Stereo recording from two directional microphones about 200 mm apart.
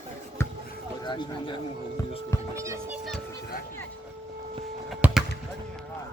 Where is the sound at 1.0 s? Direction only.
20° left (ahead or behind).